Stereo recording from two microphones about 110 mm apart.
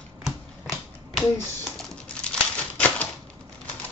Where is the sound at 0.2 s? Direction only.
Centre (ahead or behind).